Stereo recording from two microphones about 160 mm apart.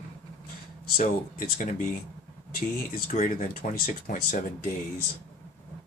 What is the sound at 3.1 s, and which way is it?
Speech, 55° left (ahead or behind).